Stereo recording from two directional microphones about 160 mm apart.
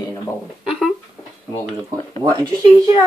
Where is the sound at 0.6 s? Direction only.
Centre (ahead or behind).